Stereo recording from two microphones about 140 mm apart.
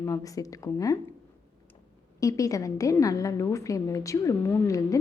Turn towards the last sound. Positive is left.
turn(degrees=25)  # may be behind; listen again after turning